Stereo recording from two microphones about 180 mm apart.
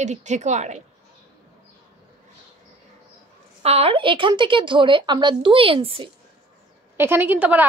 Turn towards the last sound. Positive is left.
turn(degrees=-10)  # may be behind; listen again after turning